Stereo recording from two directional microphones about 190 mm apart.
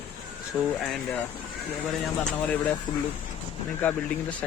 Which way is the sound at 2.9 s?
25° left (ahead or behind).